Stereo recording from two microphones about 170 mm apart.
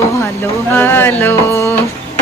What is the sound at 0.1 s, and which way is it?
Speech, 15° left (ahead or behind).